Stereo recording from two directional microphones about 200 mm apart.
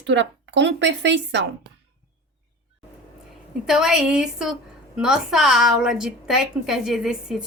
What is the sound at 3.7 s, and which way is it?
A woman's voice, centre (ahead or behind).